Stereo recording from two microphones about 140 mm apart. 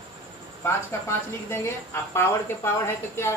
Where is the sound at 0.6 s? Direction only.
20° left (ahead or behind).